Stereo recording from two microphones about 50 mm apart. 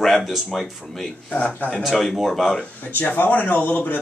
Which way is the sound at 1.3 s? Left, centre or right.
Left.